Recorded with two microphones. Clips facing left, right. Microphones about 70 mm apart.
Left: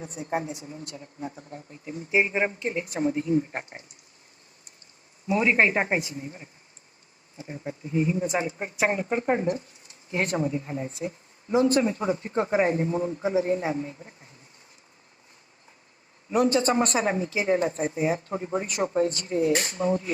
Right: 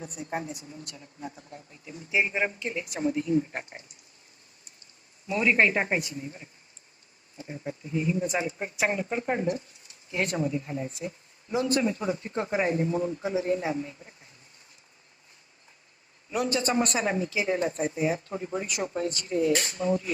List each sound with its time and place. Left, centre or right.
0.0 s a woman's voice: left
5.3 s a woman's voice: left
7.3 s speech: centre
7.9 s a woman's voice: left
16.3 s a woman's voice: left